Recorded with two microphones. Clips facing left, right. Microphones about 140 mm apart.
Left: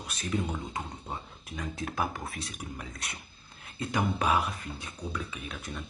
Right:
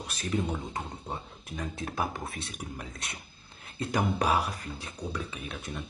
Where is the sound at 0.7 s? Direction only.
25° right (ahead or behind).